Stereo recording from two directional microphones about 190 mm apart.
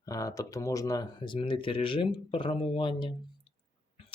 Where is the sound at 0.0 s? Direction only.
15° left (ahead or behind).